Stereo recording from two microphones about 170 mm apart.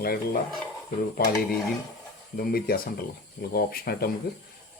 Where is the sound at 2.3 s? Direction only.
60° left (ahead or behind).